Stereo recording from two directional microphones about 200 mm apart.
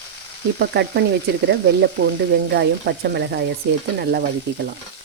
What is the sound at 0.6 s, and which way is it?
Frying, 55° right (ahead or behind).